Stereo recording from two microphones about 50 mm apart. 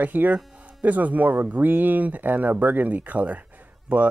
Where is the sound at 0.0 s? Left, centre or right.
Right.